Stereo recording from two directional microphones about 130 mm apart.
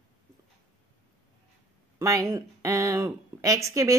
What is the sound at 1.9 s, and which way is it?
Speech, 20° right (ahead or behind).